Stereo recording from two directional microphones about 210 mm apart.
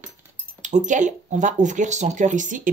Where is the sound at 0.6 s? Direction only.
35° right (ahead or behind).